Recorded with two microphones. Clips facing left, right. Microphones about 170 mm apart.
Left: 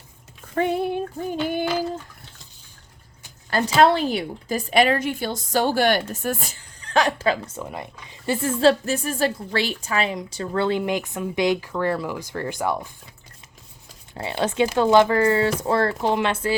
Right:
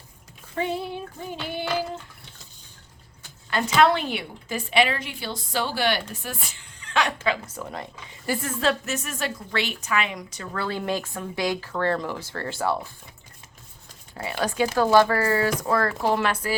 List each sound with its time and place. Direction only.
0.5 s female singing: 55° left (ahead or behind)
3.5 s a woman's voice: 35° left (ahead or behind)
7.6 s speech: 15° left (ahead or behind)
14.1 s speech: 25° left (ahead or behind)